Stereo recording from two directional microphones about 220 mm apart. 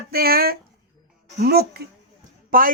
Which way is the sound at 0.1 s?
45° right (ahead or behind).